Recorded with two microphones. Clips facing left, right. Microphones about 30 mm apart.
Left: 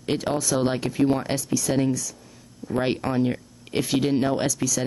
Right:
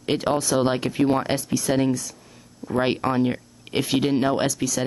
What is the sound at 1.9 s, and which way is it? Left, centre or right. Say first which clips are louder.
Speech: right 1 dB; right.